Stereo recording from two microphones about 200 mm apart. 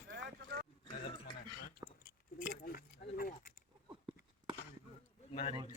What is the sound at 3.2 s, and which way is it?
Keys jangling, 45° left (ahead or behind).